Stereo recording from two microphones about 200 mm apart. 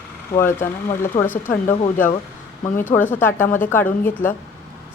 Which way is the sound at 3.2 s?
10° left (ahead or behind).